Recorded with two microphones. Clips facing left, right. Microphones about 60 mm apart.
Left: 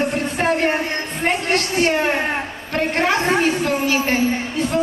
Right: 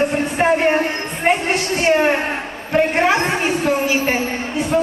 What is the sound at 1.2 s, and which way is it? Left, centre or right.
A woman's voice, centre.